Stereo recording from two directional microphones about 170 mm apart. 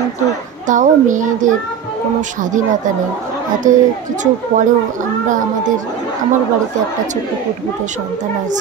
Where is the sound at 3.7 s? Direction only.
50° right (ahead or behind).